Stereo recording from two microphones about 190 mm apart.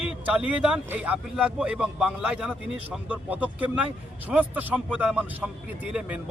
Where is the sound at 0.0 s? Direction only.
5° right (ahead or behind).